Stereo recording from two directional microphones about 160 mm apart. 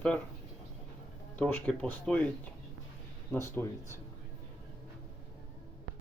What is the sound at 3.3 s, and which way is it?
Speech, 15° left (ahead or behind).